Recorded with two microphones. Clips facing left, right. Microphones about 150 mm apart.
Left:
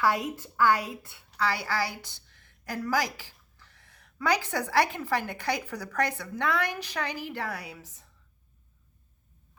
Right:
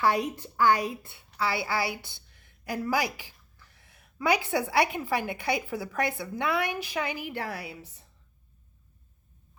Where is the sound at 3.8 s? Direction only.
15° right (ahead or behind).